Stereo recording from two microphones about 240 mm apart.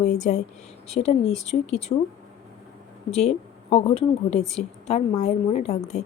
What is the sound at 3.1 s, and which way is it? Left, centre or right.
Speech, left.